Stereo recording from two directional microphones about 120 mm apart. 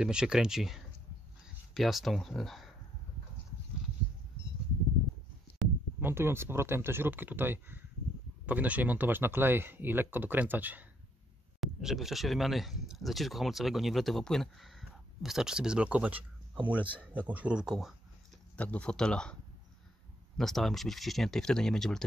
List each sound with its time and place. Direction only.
0.0 s speech: 5° right (ahead or behind)
5.6 s a sound: centre (ahead or behind)
5.9 s speech: 20° right (ahead or behind)
11.6 s speech: centre (ahead or behind)
18.6 s speech: 10° left (ahead or behind)
20.3 s speech: centre (ahead or behind)